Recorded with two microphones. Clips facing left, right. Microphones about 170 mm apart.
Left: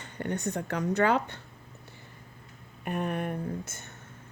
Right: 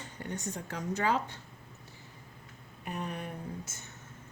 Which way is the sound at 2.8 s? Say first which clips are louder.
Left 7 dB; 55° left (ahead or behind).